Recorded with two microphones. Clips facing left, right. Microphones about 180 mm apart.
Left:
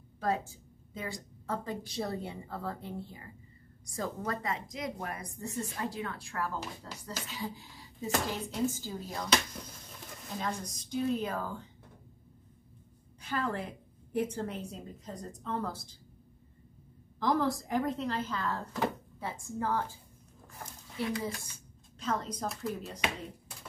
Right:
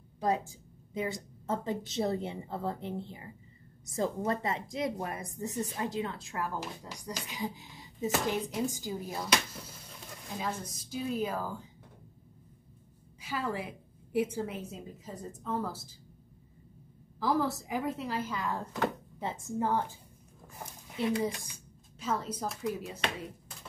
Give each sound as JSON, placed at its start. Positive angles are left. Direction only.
{"t": 0.2, "sound": "a woman's voice", "side_deg": -15}
{"t": 13.2, "sound": "a woman's voice", "side_deg": -10}
{"t": 17.2, "sound": "a woman's voice", "side_deg": -5}
{"t": 22.0, "sound": "speech", "side_deg": -5}